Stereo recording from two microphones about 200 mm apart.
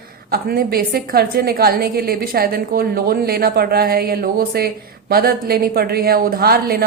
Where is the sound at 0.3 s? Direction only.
50° right (ahead or behind).